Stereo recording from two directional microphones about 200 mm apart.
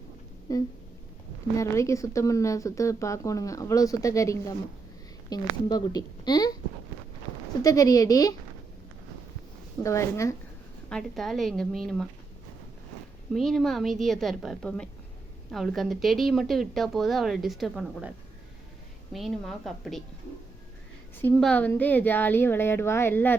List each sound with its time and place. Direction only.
0.5 s a woman's voice: 15° left (ahead or behind)
7.6 s a woman's voice: 20° left (ahead or behind)
9.8 s a woman's voice: 15° left (ahead or behind)
10.8 s a woman's voice: 5° left (ahead or behind)
13.3 s a woman's voice: centre (ahead or behind)
19.1 s a woman's voice: centre (ahead or behind)
21.2 s a woman's voice: 10° left (ahead or behind)